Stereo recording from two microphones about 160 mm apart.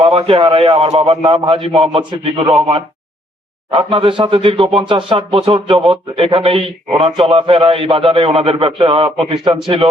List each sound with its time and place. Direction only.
0.0 s speech: 35° right (ahead or behind)